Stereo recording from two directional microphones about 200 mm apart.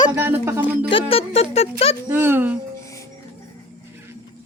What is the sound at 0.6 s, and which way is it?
Speech, 25° left (ahead or behind).